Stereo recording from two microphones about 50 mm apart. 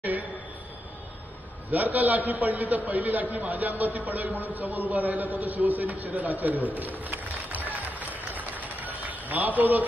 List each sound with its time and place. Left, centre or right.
0.0 s a sound: right
1.7 s a man's voice: right
7.1 s run: right
9.6 s a man's voice: right